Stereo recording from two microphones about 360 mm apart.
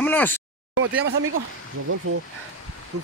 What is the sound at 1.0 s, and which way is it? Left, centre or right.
Speech, right.